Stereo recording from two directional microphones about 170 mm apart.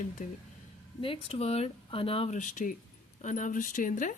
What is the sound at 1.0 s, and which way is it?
Speech, 35° left (ahead or behind).